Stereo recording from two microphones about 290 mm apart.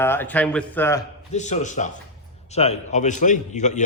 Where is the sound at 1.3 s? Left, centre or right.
Left.